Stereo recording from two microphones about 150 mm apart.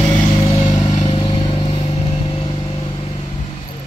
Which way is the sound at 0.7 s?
25° left (ahead or behind).